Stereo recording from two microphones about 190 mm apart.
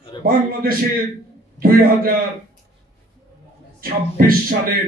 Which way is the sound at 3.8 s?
50° right (ahead or behind).